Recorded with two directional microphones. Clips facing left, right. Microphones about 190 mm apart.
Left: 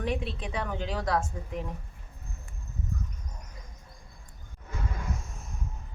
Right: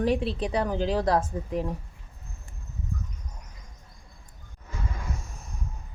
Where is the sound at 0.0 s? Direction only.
35° right (ahead or behind).